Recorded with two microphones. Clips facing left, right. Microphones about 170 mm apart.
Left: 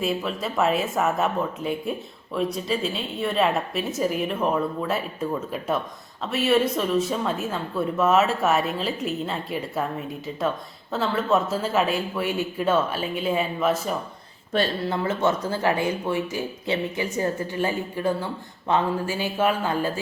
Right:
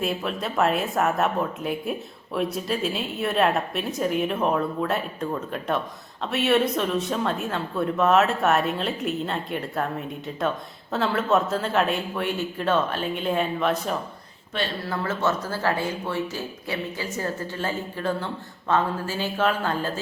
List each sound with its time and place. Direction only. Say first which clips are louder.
0.0 s speech: left 1 dB; centre (ahead or behind)
10.9 s speech: even; centre (ahead or behind)
14.8 s speech: left 2 dB; 15° left (ahead or behind)